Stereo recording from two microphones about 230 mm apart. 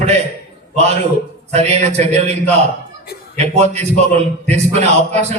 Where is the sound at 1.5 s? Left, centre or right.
Right.